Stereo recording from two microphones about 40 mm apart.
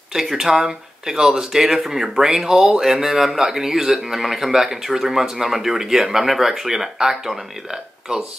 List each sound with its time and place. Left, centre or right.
0.1 s speech: centre